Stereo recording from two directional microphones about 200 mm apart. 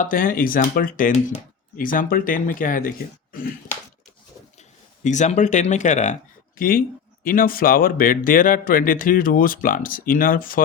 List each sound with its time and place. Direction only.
0.0 s speech: 45° left (ahead or behind)
5.0 s speech: 35° left (ahead or behind)